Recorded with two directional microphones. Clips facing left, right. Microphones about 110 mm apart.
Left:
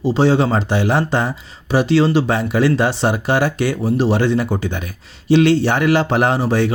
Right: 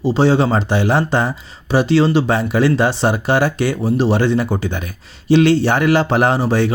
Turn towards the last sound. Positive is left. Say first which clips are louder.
# right 1 dB
turn(degrees=-35)  # may be behind; listen again after turning